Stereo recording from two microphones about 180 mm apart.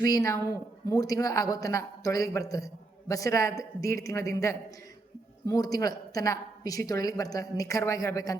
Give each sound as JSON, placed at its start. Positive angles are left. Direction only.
{"t": 0.0, "sound": "a woman's voice", "side_deg": 20}